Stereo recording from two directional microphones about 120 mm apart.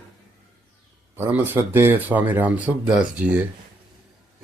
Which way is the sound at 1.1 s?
15° right (ahead or behind).